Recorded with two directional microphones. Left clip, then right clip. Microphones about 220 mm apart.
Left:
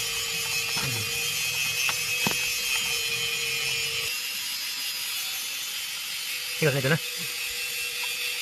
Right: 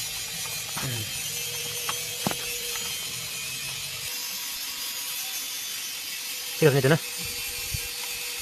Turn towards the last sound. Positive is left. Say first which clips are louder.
# right 4 dB
turn(degrees=-45)  # may be behind; listen again after turning